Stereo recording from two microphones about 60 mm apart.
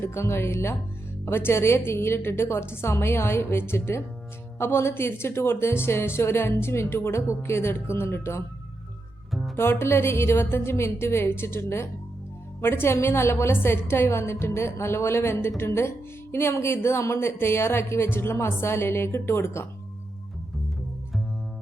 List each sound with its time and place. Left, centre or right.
0.0 s a woman's voice: left
9.6 s a woman's voice: left